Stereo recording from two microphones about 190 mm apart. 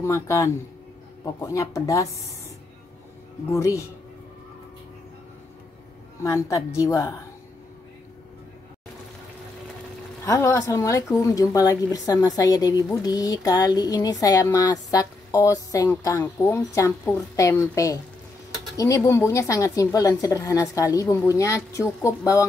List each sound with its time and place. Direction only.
0.0 s speech: 15° left (ahead or behind)
3.5 s speech: 15° left (ahead or behind)
6.2 s speech: 15° left (ahead or behind)
10.2 s speech: 15° left (ahead or behind)